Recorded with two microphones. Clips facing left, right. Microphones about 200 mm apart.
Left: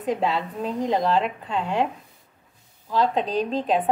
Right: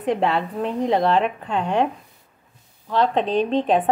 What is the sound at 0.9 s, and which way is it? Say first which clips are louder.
Speech: right 3 dB; 70° right (ahead or behind).